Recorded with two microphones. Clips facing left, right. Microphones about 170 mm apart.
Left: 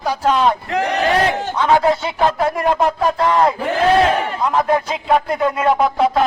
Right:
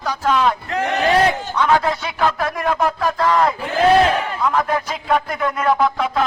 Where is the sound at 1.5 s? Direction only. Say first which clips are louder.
Left 5 dB; 25° left (ahead or behind).